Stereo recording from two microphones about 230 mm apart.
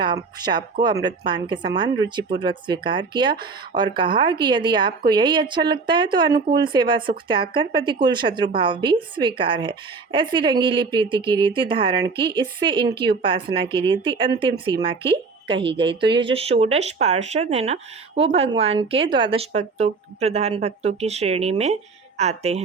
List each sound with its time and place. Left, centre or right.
0.0 s speech: centre